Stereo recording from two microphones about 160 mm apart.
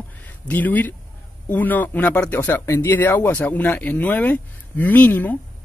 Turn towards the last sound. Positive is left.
turn(degrees=10)  # may be behind; listen again after turning